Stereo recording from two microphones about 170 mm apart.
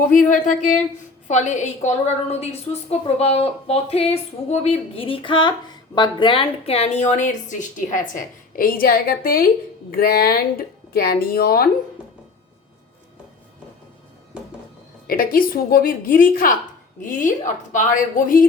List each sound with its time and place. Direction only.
0.0 s a woman's voice: 50° left (ahead or behind)
15.0 s a woman's voice: 55° left (ahead or behind)